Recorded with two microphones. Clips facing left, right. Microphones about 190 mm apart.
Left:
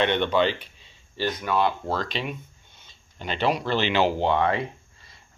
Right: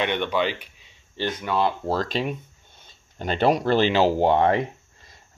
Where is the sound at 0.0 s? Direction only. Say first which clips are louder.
Left 2 dB; 10° right (ahead or behind).